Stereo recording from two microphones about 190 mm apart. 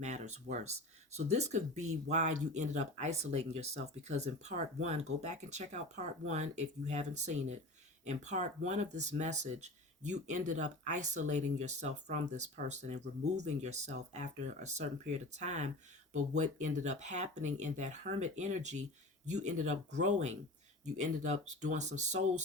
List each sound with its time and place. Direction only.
0.0 s speech: 35° right (ahead or behind)